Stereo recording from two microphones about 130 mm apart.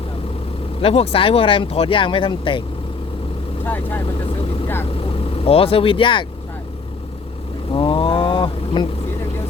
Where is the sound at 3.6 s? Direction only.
15° left (ahead or behind).